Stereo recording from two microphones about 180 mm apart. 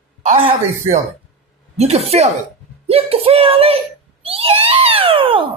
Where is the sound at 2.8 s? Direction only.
35° right (ahead or behind).